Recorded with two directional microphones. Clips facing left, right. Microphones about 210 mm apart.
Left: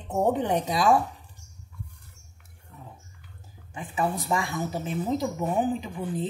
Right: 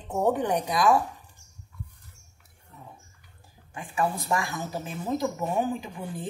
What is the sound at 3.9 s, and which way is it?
Speech, 25° left (ahead or behind).